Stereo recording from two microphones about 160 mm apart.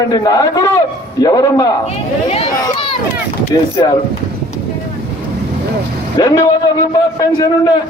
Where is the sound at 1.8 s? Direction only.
40° left (ahead or behind).